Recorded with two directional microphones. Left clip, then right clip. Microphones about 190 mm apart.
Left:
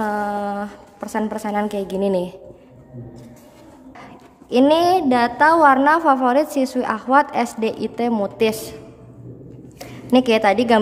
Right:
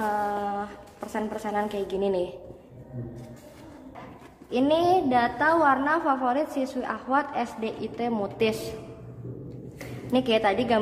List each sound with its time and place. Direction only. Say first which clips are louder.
0.0 s a sound: left 5 dB; 35° left (ahead or behind)
4.5 s a woman's voice: left 8 dB; 40° left (ahead or behind)
9.8 s a woman's voice: left 9 dB; 35° left (ahead or behind)